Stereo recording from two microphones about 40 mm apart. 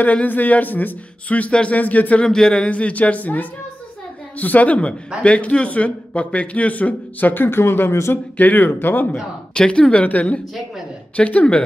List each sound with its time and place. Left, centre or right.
0.0 s speech: left
2.2 s speech: centre
2.7 s speech: left
8.4 s speech: left
9.5 s speech: left